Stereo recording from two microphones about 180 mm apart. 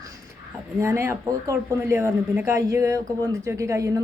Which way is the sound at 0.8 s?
15° right (ahead or behind).